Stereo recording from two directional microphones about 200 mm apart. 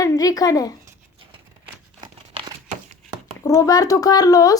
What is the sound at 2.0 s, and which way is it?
Crumpling, 20° right (ahead or behind).